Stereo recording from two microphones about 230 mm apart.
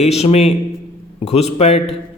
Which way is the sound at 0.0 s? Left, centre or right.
Left.